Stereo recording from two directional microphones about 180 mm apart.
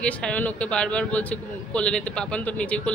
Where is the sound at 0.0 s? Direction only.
5° left (ahead or behind).